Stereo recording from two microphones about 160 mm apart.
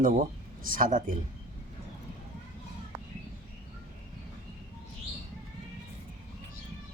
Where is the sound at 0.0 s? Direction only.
55° right (ahead or behind).